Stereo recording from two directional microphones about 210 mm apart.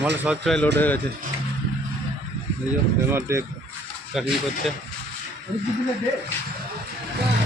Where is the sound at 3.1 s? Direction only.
15° right (ahead or behind).